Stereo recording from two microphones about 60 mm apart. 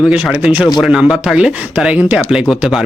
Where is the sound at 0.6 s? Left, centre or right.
Centre.